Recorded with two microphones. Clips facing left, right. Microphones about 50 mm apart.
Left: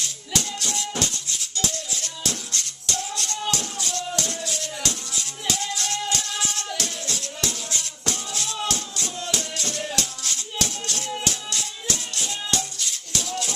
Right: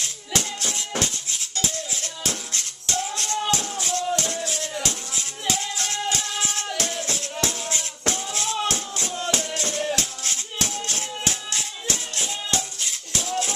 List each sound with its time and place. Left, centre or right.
0.0 s music: right